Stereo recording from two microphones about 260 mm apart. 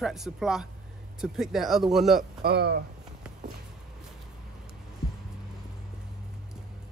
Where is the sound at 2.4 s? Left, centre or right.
Right.